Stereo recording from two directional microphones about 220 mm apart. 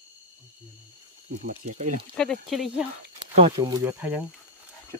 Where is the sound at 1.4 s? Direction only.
35° right (ahead or behind).